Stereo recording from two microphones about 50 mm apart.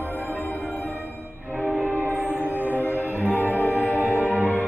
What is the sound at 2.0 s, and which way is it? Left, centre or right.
Music, left.